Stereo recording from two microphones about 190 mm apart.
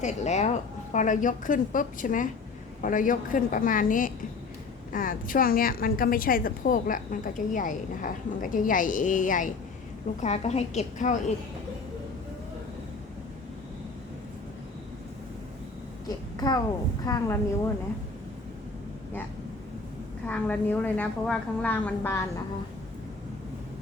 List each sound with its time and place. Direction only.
0.0 s a woman's voice: 35° left (ahead or behind)
16.0 s a sound: 20° left (ahead or behind)
17.1 s a woman's voice: 20° left (ahead or behind)
20.2 s a woman's voice: 10° left (ahead or behind)